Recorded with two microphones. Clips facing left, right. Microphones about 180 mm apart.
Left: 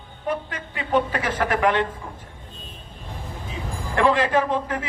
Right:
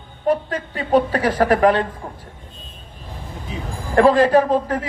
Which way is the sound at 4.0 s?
35° right (ahead or behind).